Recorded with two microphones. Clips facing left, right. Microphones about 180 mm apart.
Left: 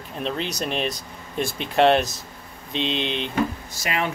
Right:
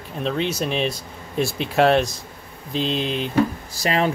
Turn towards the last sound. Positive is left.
turn(degrees=-35)  # may be behind; listen again after turning